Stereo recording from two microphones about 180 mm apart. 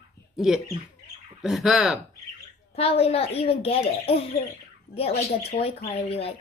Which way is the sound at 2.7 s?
35° left (ahead or behind).